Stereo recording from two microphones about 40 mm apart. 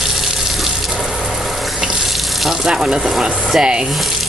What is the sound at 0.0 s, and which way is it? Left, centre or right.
Water, centre.